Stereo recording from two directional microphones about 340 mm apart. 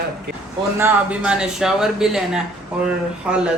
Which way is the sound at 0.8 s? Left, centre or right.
Centre.